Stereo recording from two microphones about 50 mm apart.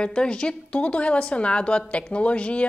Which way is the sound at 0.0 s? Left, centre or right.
Centre.